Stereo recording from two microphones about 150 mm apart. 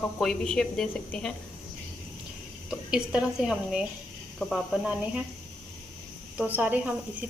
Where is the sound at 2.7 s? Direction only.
5° right (ahead or behind).